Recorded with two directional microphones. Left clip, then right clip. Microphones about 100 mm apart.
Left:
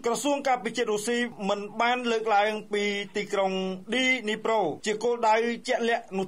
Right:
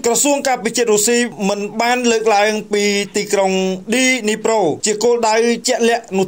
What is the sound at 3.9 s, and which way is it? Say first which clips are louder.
Speech: right 9 dB; 50° right (ahead or behind).